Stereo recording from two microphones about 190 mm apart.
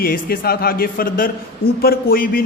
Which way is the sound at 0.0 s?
50° left (ahead or behind).